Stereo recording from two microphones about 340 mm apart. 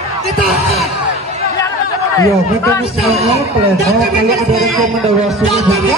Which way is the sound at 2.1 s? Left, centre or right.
Centre.